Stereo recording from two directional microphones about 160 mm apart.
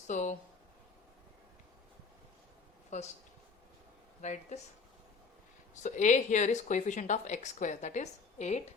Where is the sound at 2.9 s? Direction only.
45° left (ahead or behind).